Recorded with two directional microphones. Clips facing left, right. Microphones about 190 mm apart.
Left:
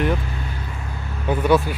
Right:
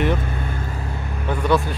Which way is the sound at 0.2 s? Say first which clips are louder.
Right 3 dB; 50° right (ahead or behind).